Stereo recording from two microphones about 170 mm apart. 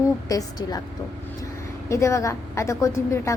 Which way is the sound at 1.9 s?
15° left (ahead or behind).